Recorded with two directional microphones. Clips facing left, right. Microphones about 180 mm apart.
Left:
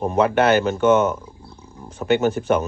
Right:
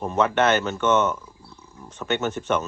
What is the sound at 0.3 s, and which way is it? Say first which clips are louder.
Speech: left 4 dB; 35° left (ahead or behind).